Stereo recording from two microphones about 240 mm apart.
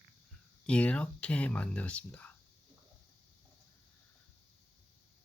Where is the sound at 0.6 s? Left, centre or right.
Centre.